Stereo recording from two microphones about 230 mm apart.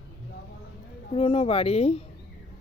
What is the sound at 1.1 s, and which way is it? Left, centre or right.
Speech, left.